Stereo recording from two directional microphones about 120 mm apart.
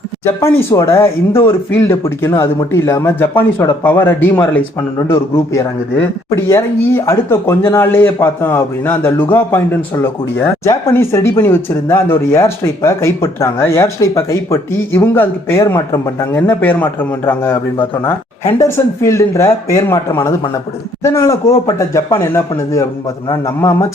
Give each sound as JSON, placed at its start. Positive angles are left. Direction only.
{"t": 0.3, "sound": "speech", "side_deg": 25}
{"t": 18.6, "sound": "speech", "side_deg": 25}